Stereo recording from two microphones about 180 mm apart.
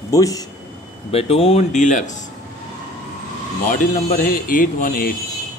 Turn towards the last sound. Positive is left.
turn(degrees=50)  # may be behind; listen again after turning